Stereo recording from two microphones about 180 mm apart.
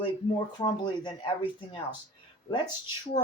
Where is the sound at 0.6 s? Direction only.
25° left (ahead or behind).